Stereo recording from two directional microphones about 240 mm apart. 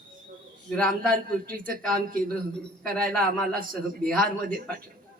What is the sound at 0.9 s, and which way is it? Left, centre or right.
A man's voice, right.